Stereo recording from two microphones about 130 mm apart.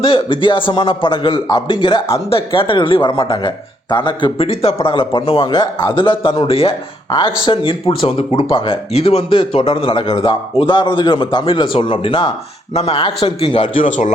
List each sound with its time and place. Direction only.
0.0 s a man's voice: 45° left (ahead or behind)
13.8 s a man's voice: 80° left